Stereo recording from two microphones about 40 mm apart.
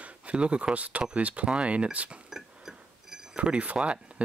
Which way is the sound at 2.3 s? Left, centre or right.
Centre.